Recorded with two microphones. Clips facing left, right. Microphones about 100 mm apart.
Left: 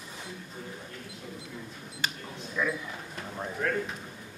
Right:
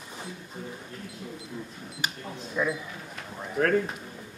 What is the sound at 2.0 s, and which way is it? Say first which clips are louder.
Speech: right 1 dB; 15° right (ahead or behind).